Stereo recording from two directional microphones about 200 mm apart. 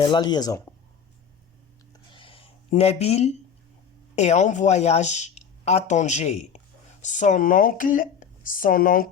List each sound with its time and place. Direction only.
0.0 s speech: 20° left (ahead or behind)
2.1 s a sound: 25° left (ahead or behind)
4.1 s speech: 35° left (ahead or behind)